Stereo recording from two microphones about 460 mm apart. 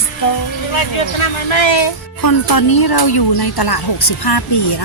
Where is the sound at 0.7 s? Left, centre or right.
Left.